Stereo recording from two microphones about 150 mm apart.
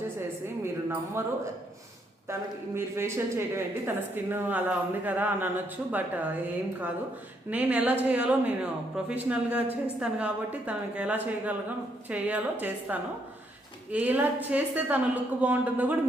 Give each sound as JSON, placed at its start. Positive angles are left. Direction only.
{"t": 1.2, "sound": "a woman's voice", "side_deg": -15}
{"t": 2.7, "sound": "a woman's voice", "side_deg": -15}